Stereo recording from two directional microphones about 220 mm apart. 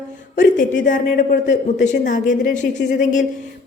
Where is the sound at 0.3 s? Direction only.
35° left (ahead or behind).